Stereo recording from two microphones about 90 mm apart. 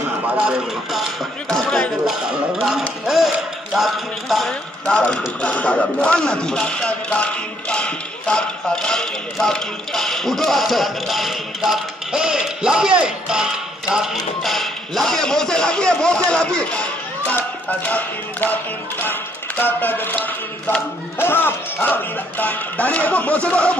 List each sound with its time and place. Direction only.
0.4 s speech: 10° right (ahead or behind)
1.5 s a man's voice: 5° left (ahead or behind)
17.6 s a sound: 15° left (ahead or behind)